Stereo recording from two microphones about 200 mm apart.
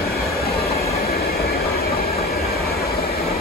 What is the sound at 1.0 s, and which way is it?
Train, 50° left (ahead or behind).